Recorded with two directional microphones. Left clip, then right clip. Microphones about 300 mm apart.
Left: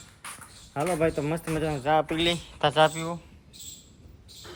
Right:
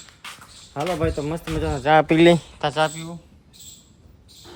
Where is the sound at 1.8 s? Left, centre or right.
Right.